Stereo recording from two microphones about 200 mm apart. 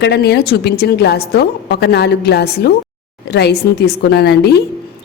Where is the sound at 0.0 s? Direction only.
55° left (ahead or behind).